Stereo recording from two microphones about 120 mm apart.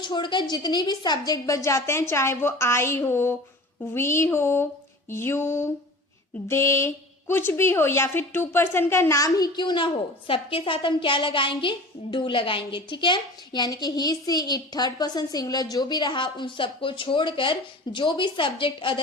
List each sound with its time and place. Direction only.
0.0 s a woman's voice: 40° left (ahead or behind)